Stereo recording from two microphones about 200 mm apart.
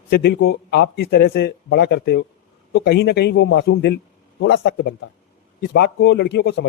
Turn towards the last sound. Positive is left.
turn(degrees=60)  # may be behind; listen again after turning